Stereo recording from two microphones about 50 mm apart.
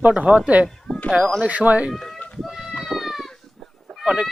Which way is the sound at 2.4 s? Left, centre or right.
Centre.